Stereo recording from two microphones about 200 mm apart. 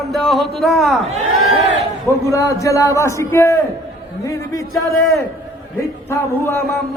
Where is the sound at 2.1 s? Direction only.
15° left (ahead or behind).